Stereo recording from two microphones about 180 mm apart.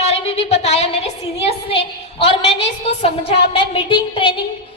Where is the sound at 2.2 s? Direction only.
35° left (ahead or behind).